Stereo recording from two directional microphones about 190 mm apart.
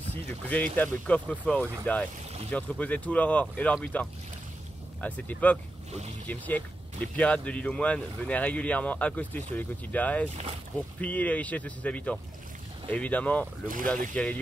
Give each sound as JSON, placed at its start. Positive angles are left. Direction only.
{"t": 0.1, "sound": "speech", "side_deg": 10}
{"t": 10.3, "sound": "speech", "side_deg": -35}
{"t": 11.0, "sound": "speech", "side_deg": 10}